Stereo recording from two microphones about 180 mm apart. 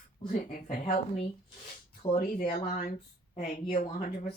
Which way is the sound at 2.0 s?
30° left (ahead or behind).